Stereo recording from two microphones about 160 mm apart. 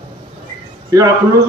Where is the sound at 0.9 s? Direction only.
20° right (ahead or behind).